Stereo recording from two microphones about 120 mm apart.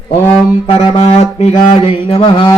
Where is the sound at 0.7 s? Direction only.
55° left (ahead or behind).